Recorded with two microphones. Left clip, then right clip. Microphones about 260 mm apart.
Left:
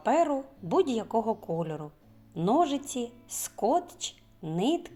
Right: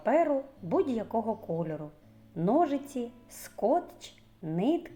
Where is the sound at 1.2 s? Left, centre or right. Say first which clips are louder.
Left 2 dB; left.